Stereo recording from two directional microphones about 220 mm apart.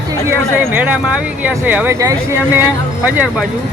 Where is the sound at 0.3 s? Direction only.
10° right (ahead or behind).